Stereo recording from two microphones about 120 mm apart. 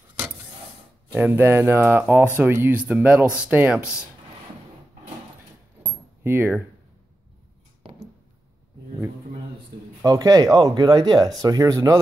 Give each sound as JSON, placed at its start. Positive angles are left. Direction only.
{"t": 1.1, "sound": "speech", "side_deg": -15}
{"t": 5.8, "sound": "keys jangling", "side_deg": -15}
{"t": 10.0, "sound": "speech", "side_deg": -30}